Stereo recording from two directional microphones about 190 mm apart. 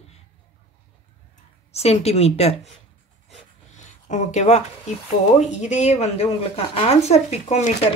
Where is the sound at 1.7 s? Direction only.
35° left (ahead or behind).